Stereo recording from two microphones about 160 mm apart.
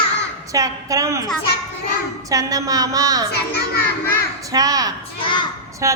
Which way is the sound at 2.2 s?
20° right (ahead or behind).